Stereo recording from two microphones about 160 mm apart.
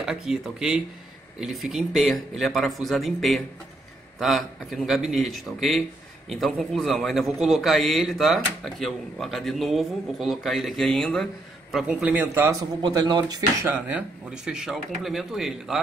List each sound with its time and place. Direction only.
0.0 s a man's voice: centre (ahead or behind)
12.8 s speech: 30° right (ahead or behind)
13.7 s a man's voice: 10° right (ahead or behind)